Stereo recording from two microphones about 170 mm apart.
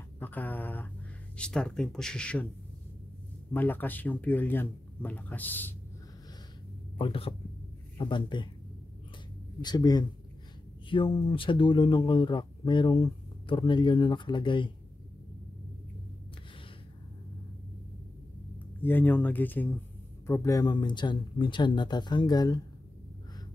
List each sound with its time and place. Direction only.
0.2 s speech: 10° left (ahead or behind)
3.5 s speech: 10° left (ahead or behind)
7.0 s speech: 35° left (ahead or behind)
9.6 s speech: 25° left (ahead or behind)
18.8 s speech: 10° left (ahead or behind)